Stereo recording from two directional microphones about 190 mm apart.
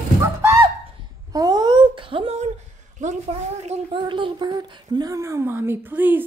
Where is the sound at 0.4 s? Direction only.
15° right (ahead or behind).